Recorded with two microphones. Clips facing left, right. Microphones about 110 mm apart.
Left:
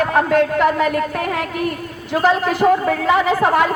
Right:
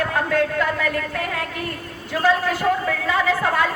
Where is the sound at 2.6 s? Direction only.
35° left (ahead or behind).